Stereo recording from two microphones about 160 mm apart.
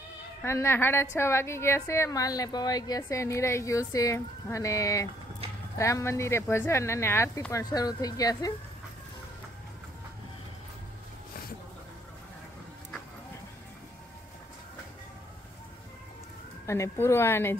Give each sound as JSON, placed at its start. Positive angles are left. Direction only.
{"t": 0.4, "sound": "a woman's voice", "side_deg": 15}
{"t": 16.6, "sound": "speech", "side_deg": 20}